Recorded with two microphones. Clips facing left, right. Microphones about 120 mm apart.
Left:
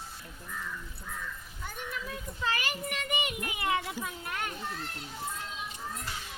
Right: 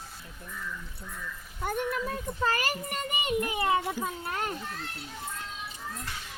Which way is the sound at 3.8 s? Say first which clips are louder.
Right 5 dB; 45° right (ahead or behind).